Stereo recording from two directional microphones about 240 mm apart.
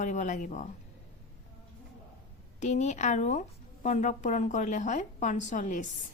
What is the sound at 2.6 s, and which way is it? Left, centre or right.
A woman's voice, left.